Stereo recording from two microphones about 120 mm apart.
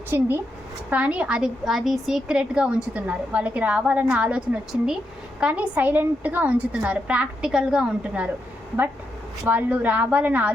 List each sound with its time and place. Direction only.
0.1 s a woman's voice: 20° right (ahead or behind)
9.5 s a woman's voice: 15° right (ahead or behind)